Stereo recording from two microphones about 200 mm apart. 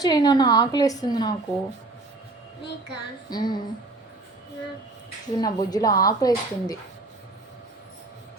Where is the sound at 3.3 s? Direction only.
20° left (ahead or behind).